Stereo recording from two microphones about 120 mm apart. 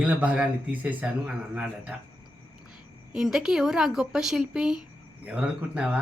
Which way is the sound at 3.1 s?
5° right (ahead or behind).